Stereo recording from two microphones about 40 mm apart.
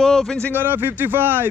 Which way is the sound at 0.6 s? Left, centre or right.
Right.